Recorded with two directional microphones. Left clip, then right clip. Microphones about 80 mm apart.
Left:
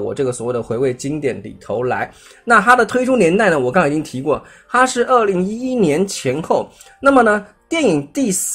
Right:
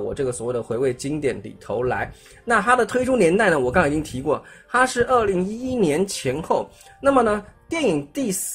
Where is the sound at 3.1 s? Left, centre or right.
Centre.